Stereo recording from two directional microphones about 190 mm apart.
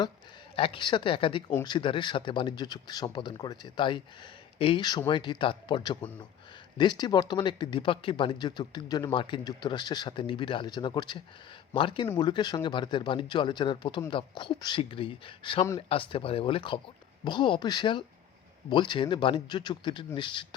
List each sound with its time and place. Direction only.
0.5 s speech: 30° left (ahead or behind)